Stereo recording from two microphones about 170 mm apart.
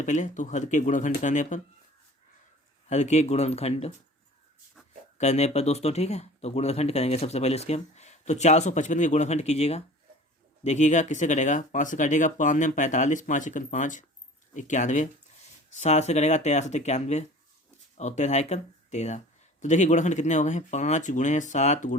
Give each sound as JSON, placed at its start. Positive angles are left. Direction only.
{"t": 0.0, "sound": "speech", "side_deg": 45}
{"t": 2.9, "sound": "speech", "side_deg": 40}
{"t": 5.1, "sound": "speech", "side_deg": 40}